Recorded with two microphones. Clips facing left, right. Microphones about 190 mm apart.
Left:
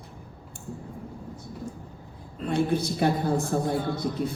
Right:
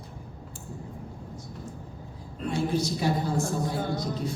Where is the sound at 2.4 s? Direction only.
55° left (ahead or behind).